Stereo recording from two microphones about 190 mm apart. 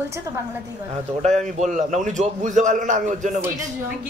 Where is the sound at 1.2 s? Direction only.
40° right (ahead or behind).